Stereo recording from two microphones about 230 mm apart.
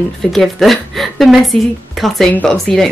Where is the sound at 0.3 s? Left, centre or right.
Centre.